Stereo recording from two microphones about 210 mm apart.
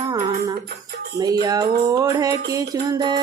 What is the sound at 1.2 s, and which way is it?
Music, 20° right (ahead or behind).